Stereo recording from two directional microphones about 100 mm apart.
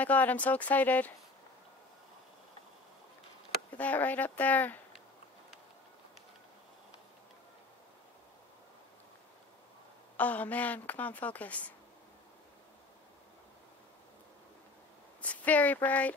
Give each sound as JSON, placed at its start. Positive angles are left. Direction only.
{"t": 0.0, "sound": "speech", "side_deg": 15}
{"t": 3.7, "sound": "speech", "side_deg": 15}
{"t": 10.1, "sound": "speech", "side_deg": 15}
{"t": 15.2, "sound": "speech", "side_deg": 15}